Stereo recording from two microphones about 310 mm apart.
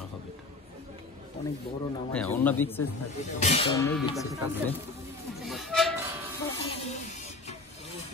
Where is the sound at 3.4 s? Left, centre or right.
Centre.